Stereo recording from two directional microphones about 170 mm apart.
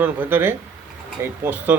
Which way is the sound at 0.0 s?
10° right (ahead or behind).